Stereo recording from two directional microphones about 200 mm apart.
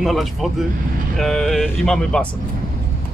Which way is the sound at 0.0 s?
Centre (ahead or behind).